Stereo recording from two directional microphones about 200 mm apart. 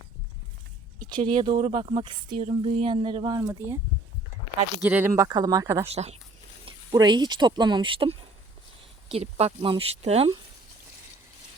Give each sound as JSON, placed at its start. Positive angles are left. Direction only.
{"t": 1.0, "sound": "speech", "side_deg": -25}
{"t": 4.8, "sound": "speech", "side_deg": -10}
{"t": 5.8, "sound": "speech", "side_deg": -30}